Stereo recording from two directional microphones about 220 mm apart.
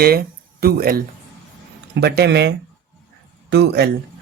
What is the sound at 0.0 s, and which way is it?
Speech, 45° right (ahead or behind).